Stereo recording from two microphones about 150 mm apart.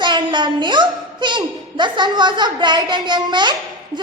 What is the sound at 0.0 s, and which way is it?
A woman's voice, 30° right (ahead or behind).